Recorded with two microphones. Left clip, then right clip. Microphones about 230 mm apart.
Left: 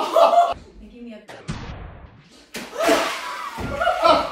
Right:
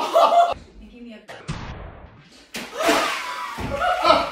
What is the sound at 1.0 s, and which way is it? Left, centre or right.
Music, centre.